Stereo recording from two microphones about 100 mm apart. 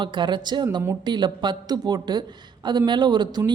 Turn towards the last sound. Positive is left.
turn(degrees=-45)  # may be behind; listen again after turning